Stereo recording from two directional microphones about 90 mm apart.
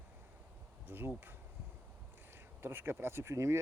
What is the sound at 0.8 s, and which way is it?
Speech, 25° right (ahead or behind).